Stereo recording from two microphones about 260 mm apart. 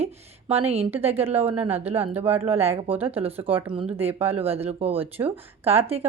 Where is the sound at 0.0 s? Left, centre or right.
Right.